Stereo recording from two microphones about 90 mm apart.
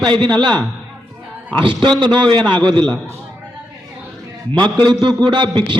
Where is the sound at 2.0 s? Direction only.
65° right (ahead or behind).